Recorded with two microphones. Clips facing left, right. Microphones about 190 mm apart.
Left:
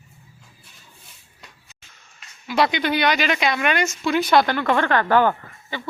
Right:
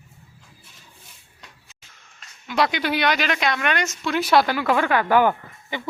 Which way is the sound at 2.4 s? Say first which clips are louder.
Left 2 dB; centre (ahead or behind).